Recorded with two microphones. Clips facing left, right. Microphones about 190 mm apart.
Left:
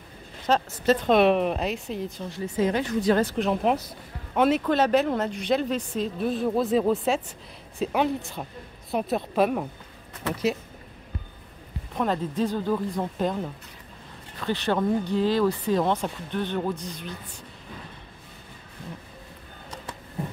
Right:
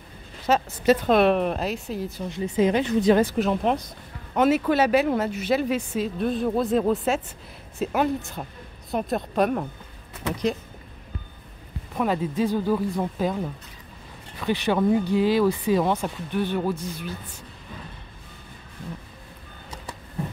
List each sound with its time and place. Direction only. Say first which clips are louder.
0.5 s speech: right 2 dB; 5° right (ahead or behind)
2.2 s speech: right 4 dB; 20° right (ahead or behind)
3.4 s speech: even; 5° left (ahead or behind)
11.9 s speech: right 2 dB; 5° right (ahead or behind)